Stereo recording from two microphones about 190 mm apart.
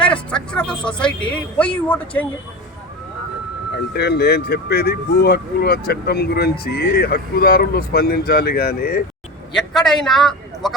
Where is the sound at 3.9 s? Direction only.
60° left (ahead or behind).